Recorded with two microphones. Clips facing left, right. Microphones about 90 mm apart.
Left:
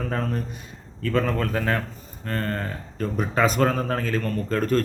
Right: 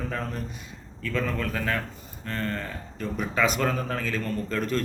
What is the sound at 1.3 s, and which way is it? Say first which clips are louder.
Speech: left 4 dB; 30° left (ahead or behind).